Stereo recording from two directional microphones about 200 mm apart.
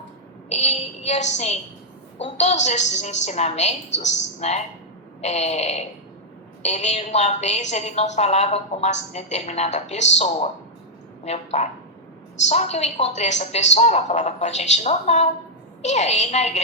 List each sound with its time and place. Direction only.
0.5 s a woman's voice: 35° left (ahead or behind)
11.3 s a woman's voice: 35° left (ahead or behind)